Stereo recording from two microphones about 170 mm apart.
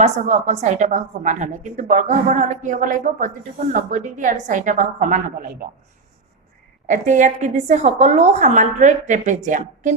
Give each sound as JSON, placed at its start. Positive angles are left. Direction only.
{"t": 0.0, "sound": "a woman's voice", "side_deg": -45}
{"t": 6.8, "sound": "a woman's voice", "side_deg": -45}